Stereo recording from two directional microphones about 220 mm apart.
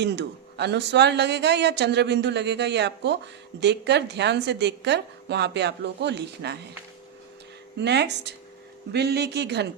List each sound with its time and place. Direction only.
0.0 s speech: 50° right (ahead or behind)
7.8 s speech: 50° right (ahead or behind)